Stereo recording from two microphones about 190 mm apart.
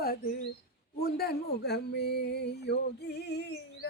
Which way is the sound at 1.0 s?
55° left (ahead or behind).